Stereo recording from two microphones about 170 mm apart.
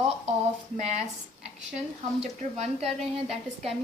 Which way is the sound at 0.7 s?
45° right (ahead or behind).